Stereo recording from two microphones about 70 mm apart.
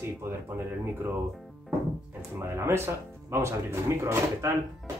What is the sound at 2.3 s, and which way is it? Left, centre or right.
Speech, right.